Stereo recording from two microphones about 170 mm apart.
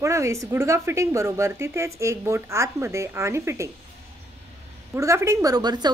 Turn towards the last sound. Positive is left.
turn(degrees=-25)  # may be behind; listen again after turning